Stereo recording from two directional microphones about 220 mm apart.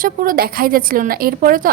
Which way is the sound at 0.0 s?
40° right (ahead or behind).